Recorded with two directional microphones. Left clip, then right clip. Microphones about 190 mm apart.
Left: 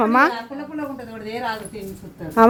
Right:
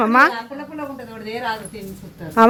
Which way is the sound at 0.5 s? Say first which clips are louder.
Even; 55° left (ahead or behind).